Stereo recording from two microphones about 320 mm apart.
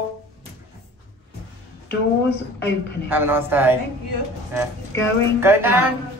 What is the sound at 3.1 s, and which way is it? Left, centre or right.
Speech, centre.